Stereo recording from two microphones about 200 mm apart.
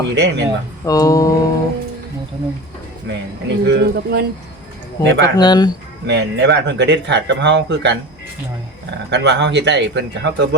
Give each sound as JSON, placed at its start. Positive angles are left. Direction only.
{"t": 0.1, "sound": "speech", "side_deg": -60}
{"t": 0.9, "sound": "a sound", "side_deg": 15}
{"t": 3.1, "sound": "speech", "side_deg": -60}
{"t": 5.0, "sound": "a sound", "side_deg": 15}
{"t": 5.4, "sound": "speech", "side_deg": 20}
{"t": 6.1, "sound": "speech", "side_deg": -60}
{"t": 9.0, "sound": "speech", "side_deg": -60}